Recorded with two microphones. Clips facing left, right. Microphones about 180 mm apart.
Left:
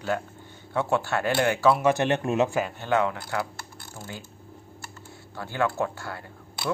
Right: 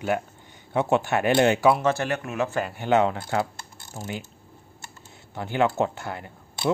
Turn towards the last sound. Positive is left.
turn(degrees=-20)  # may be behind; listen again after turning